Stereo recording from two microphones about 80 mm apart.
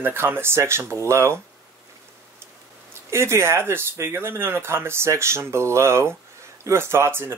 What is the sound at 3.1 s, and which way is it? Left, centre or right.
Speech, right.